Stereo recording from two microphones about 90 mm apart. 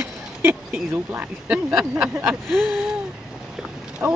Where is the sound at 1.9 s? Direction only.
15° right (ahead or behind).